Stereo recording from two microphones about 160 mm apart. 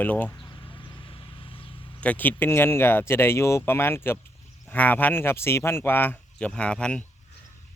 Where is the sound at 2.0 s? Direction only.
10° left (ahead or behind).